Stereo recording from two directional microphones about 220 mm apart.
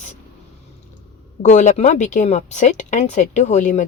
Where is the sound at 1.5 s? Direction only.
30° left (ahead or behind).